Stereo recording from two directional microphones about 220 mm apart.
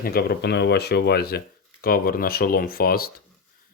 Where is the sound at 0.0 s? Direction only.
45° left (ahead or behind).